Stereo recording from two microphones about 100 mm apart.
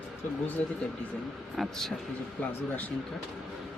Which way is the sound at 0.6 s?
15° left (ahead or behind).